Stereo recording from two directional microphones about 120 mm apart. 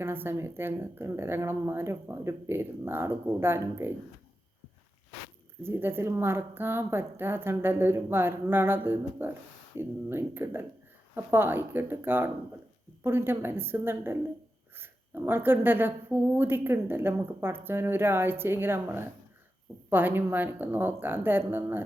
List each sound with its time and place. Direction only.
0.0 s speech: 20° right (ahead or behind)
5.6 s a woman's voice: 20° right (ahead or behind)